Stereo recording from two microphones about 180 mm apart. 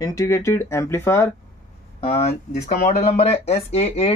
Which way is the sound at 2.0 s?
35° left (ahead or behind).